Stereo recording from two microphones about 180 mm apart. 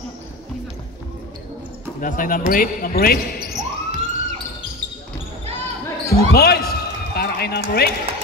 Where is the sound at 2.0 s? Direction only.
50° left (ahead or behind).